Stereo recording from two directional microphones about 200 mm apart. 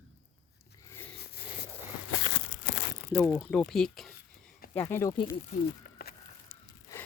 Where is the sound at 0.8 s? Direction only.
10° left (ahead or behind).